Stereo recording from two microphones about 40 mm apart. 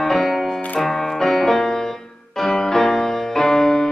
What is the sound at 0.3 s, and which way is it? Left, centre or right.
Music, centre.